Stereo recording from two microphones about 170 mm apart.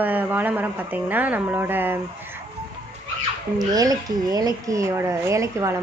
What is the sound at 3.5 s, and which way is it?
Speech, 20° right (ahead or behind).